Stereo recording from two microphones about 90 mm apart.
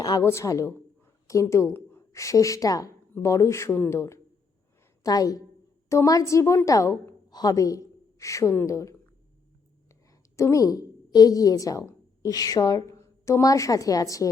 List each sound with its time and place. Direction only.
0.2 s a woman's voice: 30° left (ahead or behind)
5.0 s a woman's voice: 45° left (ahead or behind)